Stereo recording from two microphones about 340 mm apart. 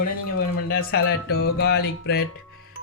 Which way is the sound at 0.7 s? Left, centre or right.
Left.